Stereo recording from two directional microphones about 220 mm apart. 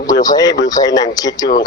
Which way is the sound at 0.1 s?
15° left (ahead or behind).